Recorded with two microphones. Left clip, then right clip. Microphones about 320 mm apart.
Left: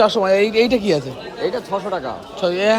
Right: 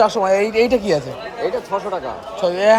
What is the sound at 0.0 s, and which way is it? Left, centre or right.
Speech, centre.